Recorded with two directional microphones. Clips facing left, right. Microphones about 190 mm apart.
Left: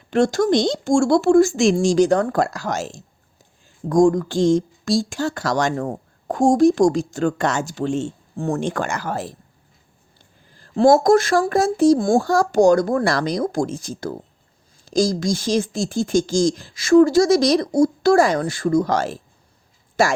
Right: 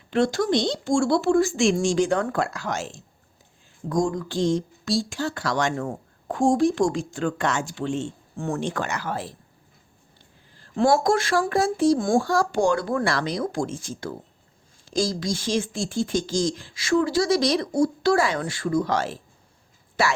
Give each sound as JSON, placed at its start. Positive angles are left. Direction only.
{"t": 0.1, "sound": "speech", "side_deg": 45}
{"t": 8.6, "sound": "speech", "side_deg": 50}
{"t": 10.6, "sound": "speech", "side_deg": 40}